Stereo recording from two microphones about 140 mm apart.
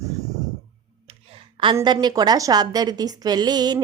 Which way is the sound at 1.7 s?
30° right (ahead or behind).